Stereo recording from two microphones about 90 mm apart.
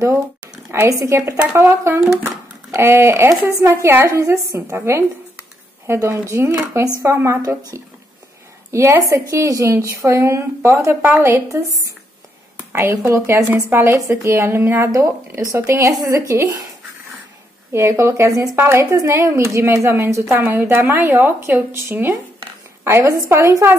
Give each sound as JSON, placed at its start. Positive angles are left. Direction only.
{"t": 0.7, "sound": "a woman's voice", "side_deg": -35}
{"t": 17.7, "sound": "a woman's voice", "side_deg": -30}